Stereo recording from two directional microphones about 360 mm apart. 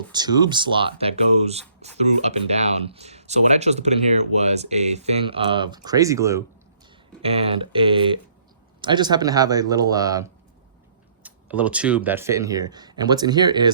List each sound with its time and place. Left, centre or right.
0.1 s speech: centre